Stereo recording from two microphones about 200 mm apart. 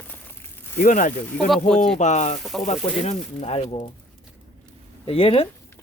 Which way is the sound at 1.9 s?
35° left (ahead or behind).